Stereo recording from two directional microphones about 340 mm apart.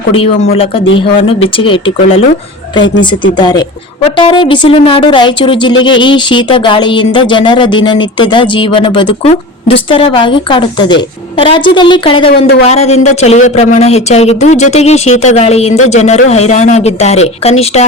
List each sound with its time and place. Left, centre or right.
0.1 s speech: centre
3.3 s speech: centre